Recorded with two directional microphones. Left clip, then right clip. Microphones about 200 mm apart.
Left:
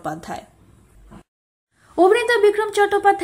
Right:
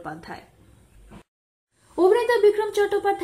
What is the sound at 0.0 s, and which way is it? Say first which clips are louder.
Speech: left 7 dB; 20° left (ahead or behind).